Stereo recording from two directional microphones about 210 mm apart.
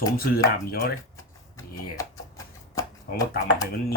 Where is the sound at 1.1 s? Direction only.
15° left (ahead or behind).